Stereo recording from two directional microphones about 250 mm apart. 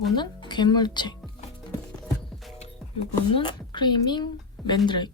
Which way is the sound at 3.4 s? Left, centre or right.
Centre.